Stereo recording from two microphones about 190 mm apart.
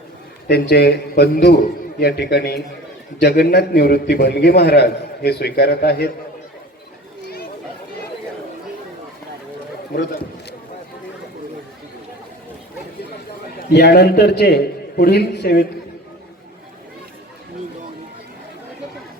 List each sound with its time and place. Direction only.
0.4 s a man's voice: 60° left (ahead or behind)
13.7 s a man's voice: 60° left (ahead or behind)